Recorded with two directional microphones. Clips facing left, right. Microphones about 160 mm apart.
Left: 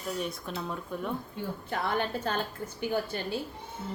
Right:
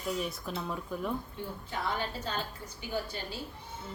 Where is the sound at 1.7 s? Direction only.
60° left (ahead or behind).